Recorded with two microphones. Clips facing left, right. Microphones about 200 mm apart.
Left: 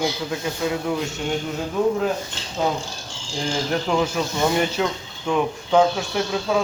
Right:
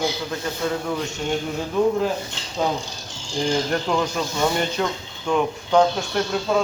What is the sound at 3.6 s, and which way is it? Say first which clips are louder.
Speech: left 1 dB; 5° left (ahead or behind).